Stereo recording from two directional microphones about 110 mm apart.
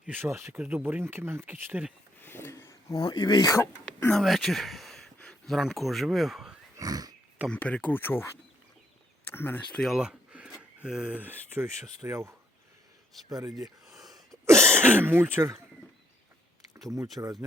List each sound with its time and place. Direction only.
0.1 s speech: 20° right (ahead or behind)
2.2 s a sound: 20° left (ahead or behind)
3.0 s speech: 40° left (ahead or behind)
4.1 s speech: centre (ahead or behind)
6.7 s pig: 35° right (ahead or behind)
7.4 s speech: 10° left (ahead or behind)
9.3 s speech: 20° left (ahead or behind)
9.7 s a sound: centre (ahead or behind)
10.8 s speech: 5° right (ahead or behind); by 12.3 s 25° right (ahead or behind)
13.2 s speech: 35° right (ahead or behind)
14.8 s speech: 20° right (ahead or behind)
17.2 s speech: 25° right (ahead or behind)